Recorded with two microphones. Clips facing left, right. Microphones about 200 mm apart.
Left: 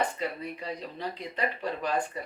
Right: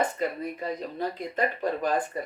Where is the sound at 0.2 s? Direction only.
45° right (ahead or behind).